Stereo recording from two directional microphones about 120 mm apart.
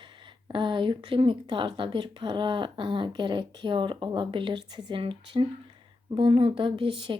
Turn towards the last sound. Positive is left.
turn(degrees=-45)  # may be behind; listen again after turning